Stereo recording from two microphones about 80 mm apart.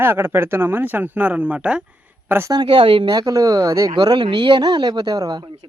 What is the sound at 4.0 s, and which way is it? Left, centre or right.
Speech, right.